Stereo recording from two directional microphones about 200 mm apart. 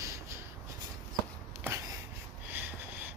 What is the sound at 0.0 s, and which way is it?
Rub, 15° right (ahead or behind).